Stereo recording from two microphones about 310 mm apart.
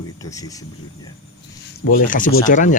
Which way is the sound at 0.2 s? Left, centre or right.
Centre.